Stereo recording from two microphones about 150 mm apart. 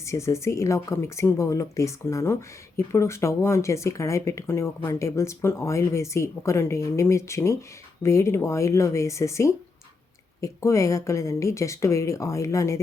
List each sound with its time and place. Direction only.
0.0 s speech: 20° left (ahead or behind)